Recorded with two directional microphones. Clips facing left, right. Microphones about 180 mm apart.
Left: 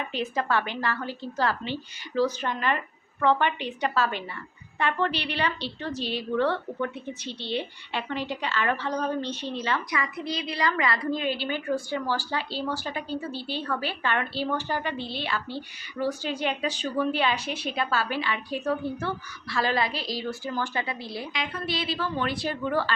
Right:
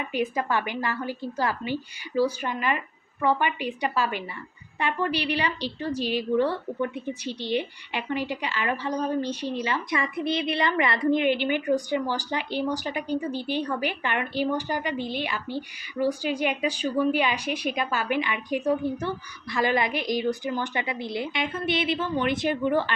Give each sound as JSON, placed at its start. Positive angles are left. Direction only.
{"t": 0.1, "sound": "a woman's voice", "side_deg": -15}
{"t": 9.9, "sound": "a woman's voice", "side_deg": -25}